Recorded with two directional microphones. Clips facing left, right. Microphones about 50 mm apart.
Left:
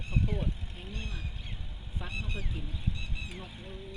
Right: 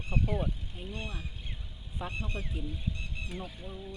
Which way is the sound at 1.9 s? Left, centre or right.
Centre.